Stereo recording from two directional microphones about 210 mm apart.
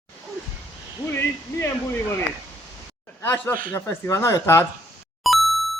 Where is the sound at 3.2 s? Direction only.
10° left (ahead or behind).